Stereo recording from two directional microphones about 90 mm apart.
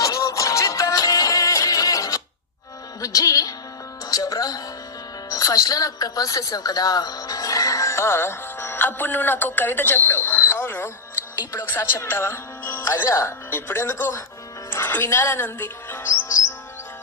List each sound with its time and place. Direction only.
0.0 s music: 40° left (ahead or behind)
5.3 s a woman's voice: 40° left (ahead or behind)
14.7 s music: 25° left (ahead or behind)